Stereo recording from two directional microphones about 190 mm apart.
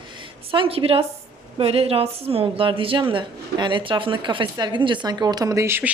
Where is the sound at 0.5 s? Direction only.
30° right (ahead or behind).